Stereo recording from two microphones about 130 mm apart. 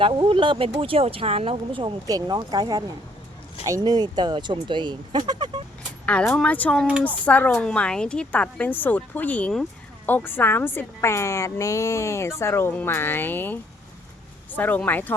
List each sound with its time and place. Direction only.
0.0 s speech: 40° right (ahead or behind)
2.0 s speech: 30° right (ahead or behind)
6.1 s a woman's voice: 10° left (ahead or behind)